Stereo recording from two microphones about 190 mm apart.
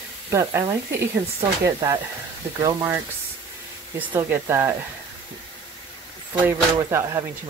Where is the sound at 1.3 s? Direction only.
15° right (ahead or behind).